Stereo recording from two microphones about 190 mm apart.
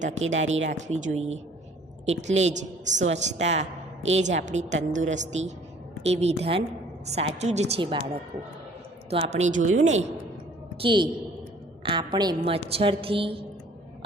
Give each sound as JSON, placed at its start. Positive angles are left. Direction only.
{"t": 0.4, "sound": "speech", "side_deg": -90}
{"t": 0.7, "sound": "a woman's voice", "side_deg": -40}
{"t": 9.0, "sound": "a woman's voice", "side_deg": -30}
{"t": 10.8, "sound": "a woman's voice", "side_deg": -25}